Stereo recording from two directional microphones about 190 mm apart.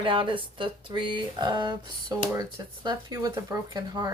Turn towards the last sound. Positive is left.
turn(degrees=-20)  # may be behind; listen again after turning